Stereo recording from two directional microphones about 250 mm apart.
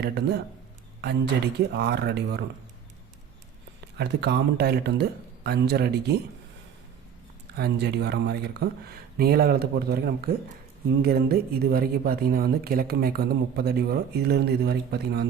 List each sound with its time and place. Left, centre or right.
0.0 s speech: right
3.9 s speech: right
7.5 s speech: right